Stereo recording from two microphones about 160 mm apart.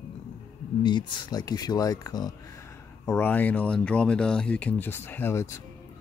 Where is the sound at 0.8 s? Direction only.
30° left (ahead or behind).